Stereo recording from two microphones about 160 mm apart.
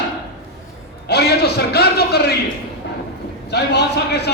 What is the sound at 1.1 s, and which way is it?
A man's voice, 90° left.